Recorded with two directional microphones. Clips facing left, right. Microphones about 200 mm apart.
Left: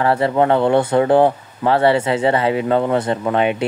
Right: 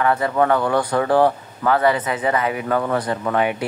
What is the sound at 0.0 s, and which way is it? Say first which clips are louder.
Speech: left 3 dB; 30° left (ahead or behind).